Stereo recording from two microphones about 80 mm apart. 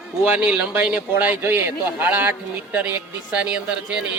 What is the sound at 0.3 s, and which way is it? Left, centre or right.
A man's voice, centre.